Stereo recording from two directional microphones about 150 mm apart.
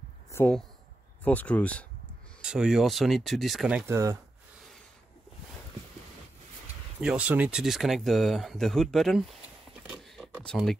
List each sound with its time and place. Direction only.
0.3 s a sound: 15° left (ahead or behind)
1.2 s speech: 10° left (ahead or behind)
2.4 s speech: 5° right (ahead or behind)
3.9 s speech: 20° right (ahead or behind)
7.0 s speech: 5° right (ahead or behind)
9.8 s a sound: centre (ahead or behind)